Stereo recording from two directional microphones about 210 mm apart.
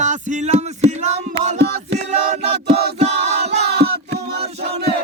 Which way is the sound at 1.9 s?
30° right (ahead or behind).